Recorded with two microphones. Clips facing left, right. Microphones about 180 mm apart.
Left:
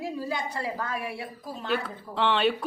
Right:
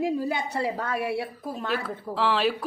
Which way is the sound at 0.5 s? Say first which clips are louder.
Right 4 dB; 70° right (ahead or behind).